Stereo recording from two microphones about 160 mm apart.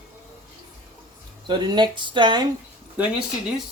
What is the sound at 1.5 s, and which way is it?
Speech, 30° right (ahead or behind).